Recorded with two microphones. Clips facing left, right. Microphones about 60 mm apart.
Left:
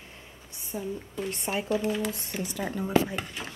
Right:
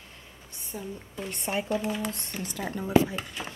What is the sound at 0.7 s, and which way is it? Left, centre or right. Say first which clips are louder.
Speech: left 4 dB; centre.